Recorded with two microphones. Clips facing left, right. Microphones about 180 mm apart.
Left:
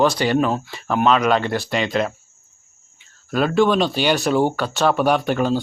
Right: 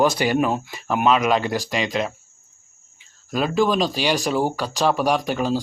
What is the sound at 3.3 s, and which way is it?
Speech, centre (ahead or behind).